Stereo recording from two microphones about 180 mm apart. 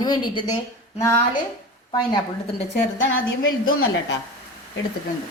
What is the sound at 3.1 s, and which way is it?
Speech, 90° left.